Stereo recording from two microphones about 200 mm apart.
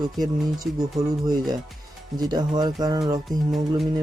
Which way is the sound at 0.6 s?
Centre (ahead or behind).